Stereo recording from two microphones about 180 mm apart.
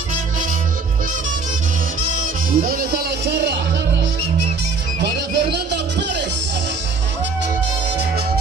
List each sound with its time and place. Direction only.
2.1 s music: 55° right (ahead or behind)
5.0 s music: 70° right (ahead or behind)